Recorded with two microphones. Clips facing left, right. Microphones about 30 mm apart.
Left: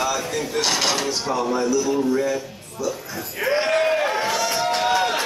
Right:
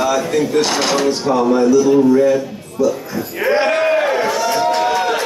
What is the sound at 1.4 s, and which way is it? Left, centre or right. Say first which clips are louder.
A man's voice: right 9 dB; right.